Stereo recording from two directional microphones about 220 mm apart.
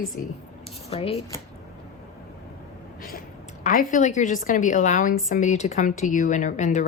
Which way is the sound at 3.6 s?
35° left (ahead or behind).